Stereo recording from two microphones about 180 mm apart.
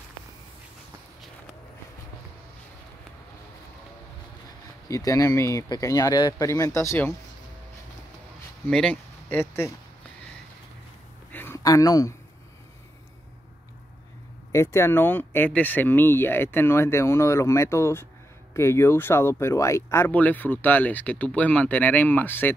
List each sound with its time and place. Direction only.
4.8 s speech: 20° left (ahead or behind)
8.6 s speech: 5° left (ahead or behind)
11.3 s a sound: 15° left (ahead or behind)
14.5 s speech: 15° left (ahead or behind)